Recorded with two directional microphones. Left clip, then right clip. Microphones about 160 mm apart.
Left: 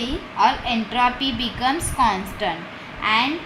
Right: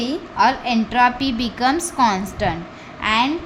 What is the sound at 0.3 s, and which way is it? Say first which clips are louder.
A woman's voice: right 2 dB; 90° right.